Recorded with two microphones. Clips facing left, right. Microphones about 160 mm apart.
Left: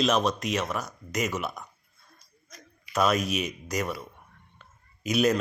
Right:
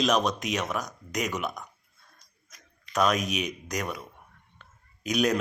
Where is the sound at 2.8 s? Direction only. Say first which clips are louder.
Left 1 dB; 5° left (ahead or behind).